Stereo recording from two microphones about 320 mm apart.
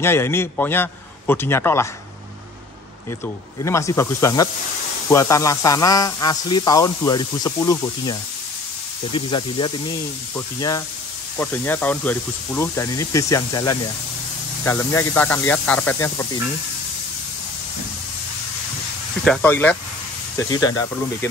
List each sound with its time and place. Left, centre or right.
0.0 s speech: centre
3.6 s speech: centre
19.2 s speech: centre